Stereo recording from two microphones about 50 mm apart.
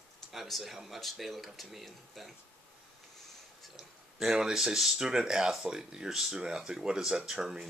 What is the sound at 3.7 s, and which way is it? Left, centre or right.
Speech, centre.